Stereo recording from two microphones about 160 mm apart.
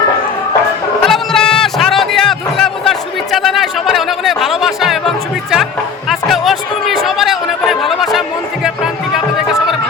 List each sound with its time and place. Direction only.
1.0 s music: centre (ahead or behind)
6.1 s a sound: centre (ahead or behind)
8.6 s music: 5° right (ahead or behind)